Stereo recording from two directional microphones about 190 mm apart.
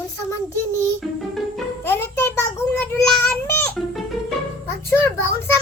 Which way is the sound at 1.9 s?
10° left (ahead or behind).